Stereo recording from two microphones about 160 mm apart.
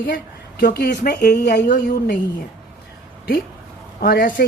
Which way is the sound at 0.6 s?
75° left (ahead or behind).